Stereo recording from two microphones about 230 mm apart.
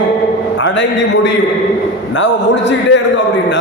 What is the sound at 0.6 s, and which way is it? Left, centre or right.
A man's voice, left.